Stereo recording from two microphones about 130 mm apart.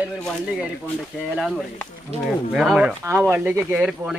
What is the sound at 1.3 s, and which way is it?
Speech, 5° right (ahead or behind).